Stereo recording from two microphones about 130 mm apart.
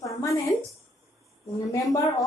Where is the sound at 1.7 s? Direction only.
25° left (ahead or behind).